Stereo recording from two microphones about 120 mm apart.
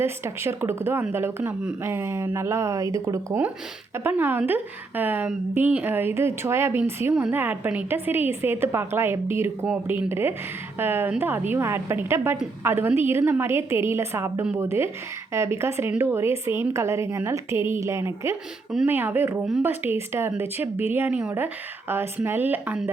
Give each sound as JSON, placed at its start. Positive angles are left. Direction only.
{"t": 0.0, "sound": "a woman's voice", "side_deg": -20}